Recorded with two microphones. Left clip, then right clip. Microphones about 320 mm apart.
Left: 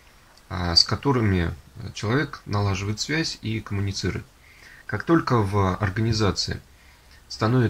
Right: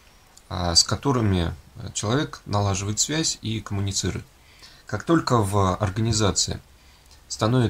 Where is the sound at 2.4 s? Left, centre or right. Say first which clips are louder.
Right 2 dB; centre.